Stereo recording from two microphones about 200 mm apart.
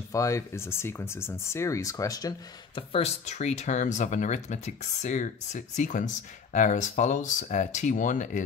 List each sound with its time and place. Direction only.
0.1 s speech: 15° left (ahead or behind); by 8.4 s 40° left (ahead or behind)